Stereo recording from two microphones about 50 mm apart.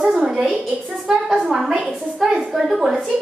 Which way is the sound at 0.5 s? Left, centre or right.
Right.